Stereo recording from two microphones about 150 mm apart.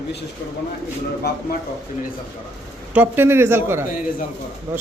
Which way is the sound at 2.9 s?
15° right (ahead or behind).